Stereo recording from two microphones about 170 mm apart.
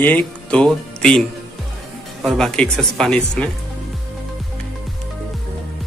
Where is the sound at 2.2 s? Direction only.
5° left (ahead or behind).